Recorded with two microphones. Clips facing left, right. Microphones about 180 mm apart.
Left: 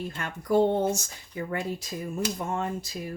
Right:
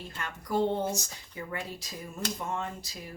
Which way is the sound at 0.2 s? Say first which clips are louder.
Left 6 dB; 50° left (ahead or behind).